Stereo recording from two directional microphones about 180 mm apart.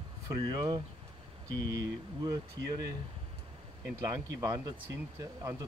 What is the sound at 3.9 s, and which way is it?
Speech, 15° right (ahead or behind).